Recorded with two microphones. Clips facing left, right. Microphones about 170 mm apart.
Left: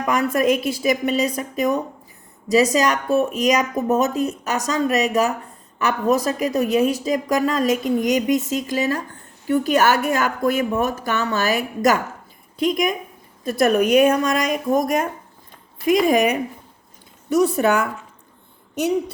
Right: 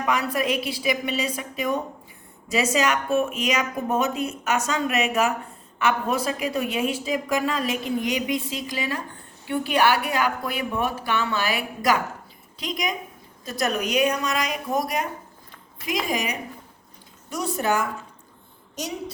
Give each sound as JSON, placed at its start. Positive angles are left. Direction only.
{"t": 0.1, "sound": "a woman's voice", "side_deg": 45}